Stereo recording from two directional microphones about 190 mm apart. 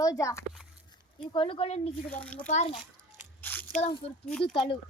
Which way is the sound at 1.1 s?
25° left (ahead or behind).